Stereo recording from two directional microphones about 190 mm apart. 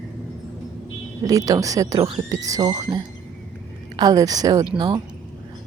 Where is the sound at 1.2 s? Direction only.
20° right (ahead or behind).